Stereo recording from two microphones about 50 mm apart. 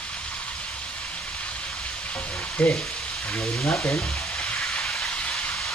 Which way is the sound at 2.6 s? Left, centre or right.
Left.